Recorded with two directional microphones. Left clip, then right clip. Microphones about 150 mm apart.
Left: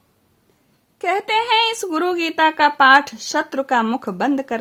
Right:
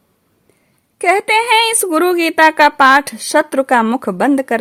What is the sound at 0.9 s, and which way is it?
Speech, 30° right (ahead or behind).